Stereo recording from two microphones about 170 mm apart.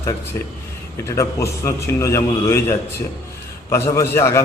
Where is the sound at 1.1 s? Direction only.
15° left (ahead or behind).